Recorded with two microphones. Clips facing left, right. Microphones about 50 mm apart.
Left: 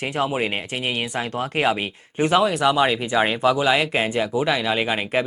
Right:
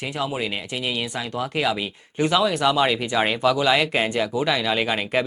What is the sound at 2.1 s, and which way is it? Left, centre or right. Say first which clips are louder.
Speech: left 2 dB; centre.